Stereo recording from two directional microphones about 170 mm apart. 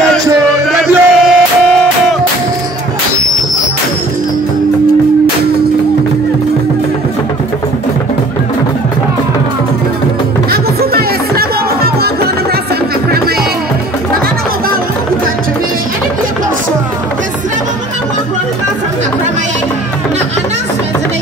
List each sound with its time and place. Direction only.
0.7 s music: centre (ahead or behind)
10.5 s music: 65° right (ahead or behind)